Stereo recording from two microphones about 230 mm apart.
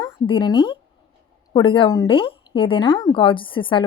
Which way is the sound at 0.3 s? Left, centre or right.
Left.